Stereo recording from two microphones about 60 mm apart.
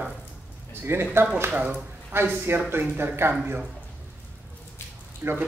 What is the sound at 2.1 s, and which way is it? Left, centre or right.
Speech, right.